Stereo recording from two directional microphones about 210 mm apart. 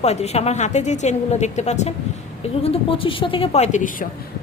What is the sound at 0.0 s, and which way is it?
A woman's voice, 30° left (ahead or behind).